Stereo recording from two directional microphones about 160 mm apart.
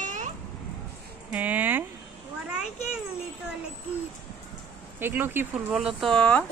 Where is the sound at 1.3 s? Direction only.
10° right (ahead or behind).